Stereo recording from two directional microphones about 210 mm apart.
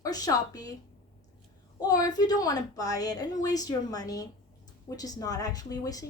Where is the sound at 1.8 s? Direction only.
20° left (ahead or behind).